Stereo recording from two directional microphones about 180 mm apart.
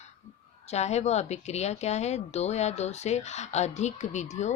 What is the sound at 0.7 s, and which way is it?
Speech, 40° left (ahead or behind).